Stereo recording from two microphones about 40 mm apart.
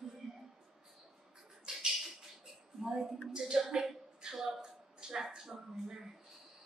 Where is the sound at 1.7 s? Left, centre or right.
Centre.